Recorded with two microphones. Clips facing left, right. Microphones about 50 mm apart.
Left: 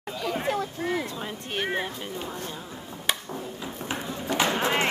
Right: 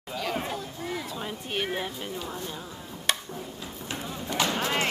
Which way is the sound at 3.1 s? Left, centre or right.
Centre.